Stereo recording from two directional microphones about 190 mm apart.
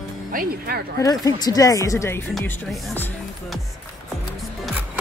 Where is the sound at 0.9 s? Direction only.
20° left (ahead or behind).